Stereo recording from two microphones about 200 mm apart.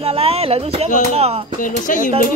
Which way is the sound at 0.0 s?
30° right (ahead or behind).